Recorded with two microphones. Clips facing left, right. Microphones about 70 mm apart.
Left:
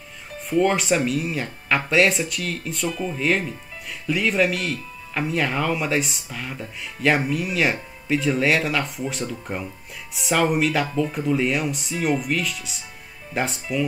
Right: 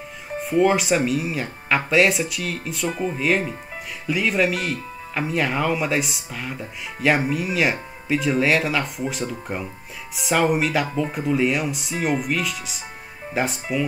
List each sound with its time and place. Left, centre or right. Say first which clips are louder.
0.4 s speech: right 2 dB; centre
2.9 s speech: right 4 dB; right
3.2 s speech: even; centre